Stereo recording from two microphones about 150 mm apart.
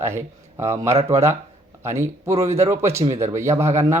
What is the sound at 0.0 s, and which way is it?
Speech, 15° right (ahead or behind).